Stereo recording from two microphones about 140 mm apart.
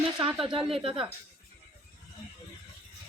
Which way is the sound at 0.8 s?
40° right (ahead or behind).